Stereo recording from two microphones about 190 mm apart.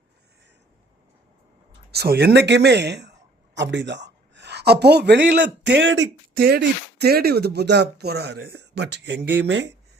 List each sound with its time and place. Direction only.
1.9 s speech: 55° right (ahead or behind)